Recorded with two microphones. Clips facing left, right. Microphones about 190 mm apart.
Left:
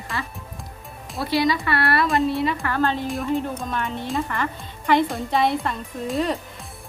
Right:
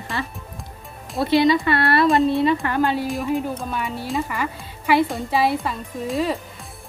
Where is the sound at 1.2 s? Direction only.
25° right (ahead or behind).